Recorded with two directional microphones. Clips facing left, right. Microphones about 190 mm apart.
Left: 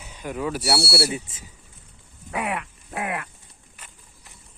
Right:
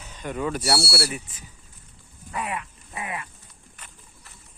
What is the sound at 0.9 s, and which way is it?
Speech, 25° left (ahead or behind).